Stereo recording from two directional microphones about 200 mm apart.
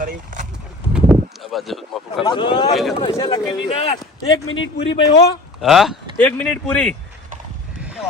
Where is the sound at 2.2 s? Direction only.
25° left (ahead or behind).